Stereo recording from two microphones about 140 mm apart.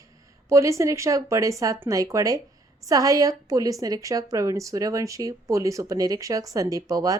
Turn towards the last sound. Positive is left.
turn(degrees=-25)  # may be behind; listen again after turning